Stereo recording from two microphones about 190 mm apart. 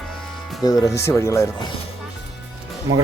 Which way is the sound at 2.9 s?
90° right.